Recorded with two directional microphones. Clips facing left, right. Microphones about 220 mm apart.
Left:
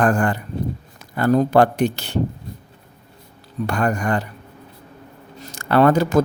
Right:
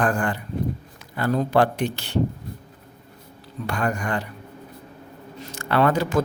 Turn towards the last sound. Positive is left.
turn(degrees=45)  # may be behind; listen again after turning